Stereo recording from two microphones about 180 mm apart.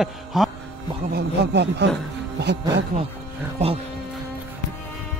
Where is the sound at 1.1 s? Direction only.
70° right (ahead or behind).